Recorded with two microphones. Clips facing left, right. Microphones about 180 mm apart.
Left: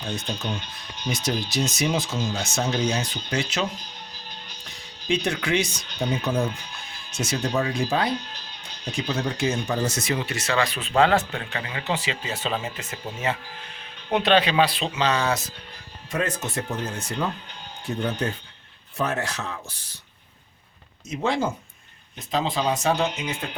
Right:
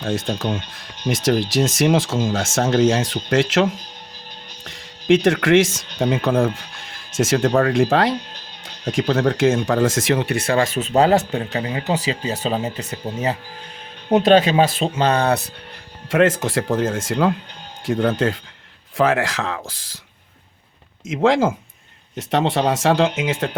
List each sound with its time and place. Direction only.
0.0 s speech: 90° right
6.1 s speech: 55° right (ahead or behind)
7.2 s speech: 90° right
7.4 s speech: 55° right (ahead or behind)
7.7 s speech: 90° right; by 15.4 s 60° right (ahead or behind)
16.0 s speech: 90° right
21.1 s speech: 90° right
22.2 s speech: 75° right (ahead or behind); by 23.5 s 90° right